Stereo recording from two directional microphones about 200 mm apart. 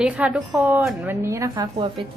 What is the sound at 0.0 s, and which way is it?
A woman's voice, 5° right (ahead or behind).